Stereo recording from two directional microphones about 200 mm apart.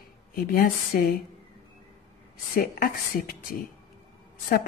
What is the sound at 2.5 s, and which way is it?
Speech, 50° left (ahead or behind).